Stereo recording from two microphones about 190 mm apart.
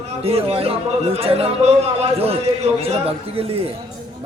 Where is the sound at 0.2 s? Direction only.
30° right (ahead or behind).